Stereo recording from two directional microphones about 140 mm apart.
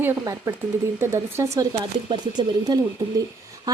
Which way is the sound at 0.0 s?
20° right (ahead or behind).